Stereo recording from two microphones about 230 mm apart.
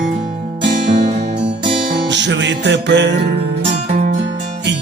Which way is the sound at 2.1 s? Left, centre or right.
Right.